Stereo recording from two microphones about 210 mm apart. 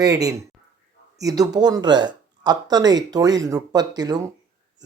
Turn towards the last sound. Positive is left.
turn(degrees=-20)  # may be behind; listen again after turning